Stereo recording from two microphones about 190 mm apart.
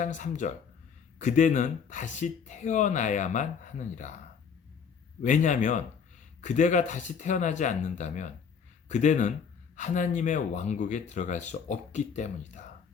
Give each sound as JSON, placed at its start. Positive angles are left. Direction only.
{"t": 0.0, "sound": "speech", "side_deg": 40}
{"t": 5.2, "sound": "speech", "side_deg": 40}